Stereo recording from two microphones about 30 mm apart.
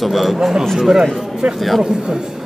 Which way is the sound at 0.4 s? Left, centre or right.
Centre.